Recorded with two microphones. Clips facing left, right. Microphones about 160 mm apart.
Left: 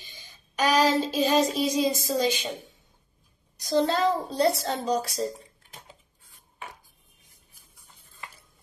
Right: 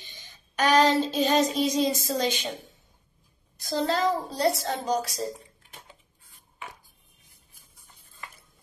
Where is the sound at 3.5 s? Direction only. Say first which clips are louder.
Left 3 dB; 20° left (ahead or behind).